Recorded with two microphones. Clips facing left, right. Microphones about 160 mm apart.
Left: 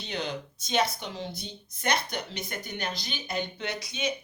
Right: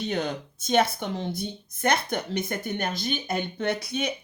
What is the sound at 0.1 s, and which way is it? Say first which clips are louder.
Speech: right 5 dB; 50° right (ahead or behind).